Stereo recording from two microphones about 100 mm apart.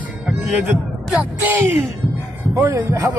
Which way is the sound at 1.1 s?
20° right (ahead or behind).